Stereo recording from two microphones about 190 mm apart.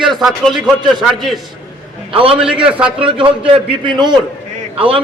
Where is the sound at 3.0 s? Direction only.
30° right (ahead or behind).